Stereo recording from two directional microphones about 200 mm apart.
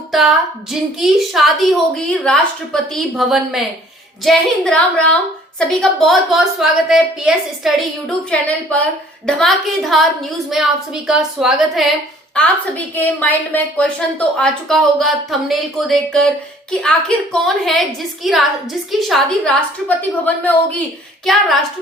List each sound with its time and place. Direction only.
0.1 s a woman's voice: centre (ahead or behind)